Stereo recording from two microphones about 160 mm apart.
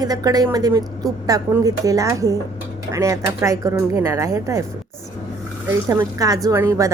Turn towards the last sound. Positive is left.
turn(degrees=-20)  # may be behind; listen again after turning